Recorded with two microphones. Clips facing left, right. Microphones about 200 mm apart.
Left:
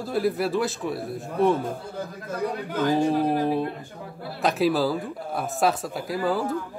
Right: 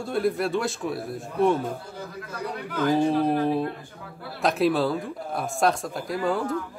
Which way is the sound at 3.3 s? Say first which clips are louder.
Even; centre (ahead or behind).